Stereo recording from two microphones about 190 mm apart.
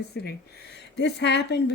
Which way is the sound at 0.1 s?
60° left (ahead or behind).